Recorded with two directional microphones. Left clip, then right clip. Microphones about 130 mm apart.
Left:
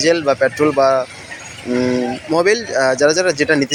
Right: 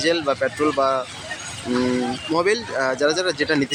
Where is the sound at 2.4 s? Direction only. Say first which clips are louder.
Left 6 dB; 20° left (ahead or behind).